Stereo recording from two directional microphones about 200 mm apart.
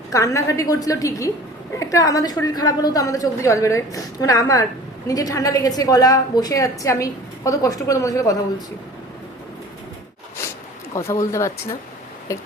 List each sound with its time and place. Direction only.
0.1 s a woman's voice: 15° left (ahead or behind)
10.9 s a woman's voice: 15° left (ahead or behind)